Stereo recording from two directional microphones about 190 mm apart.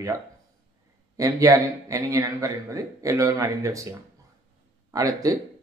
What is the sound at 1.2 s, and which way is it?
A man's voice, 15° right (ahead or behind).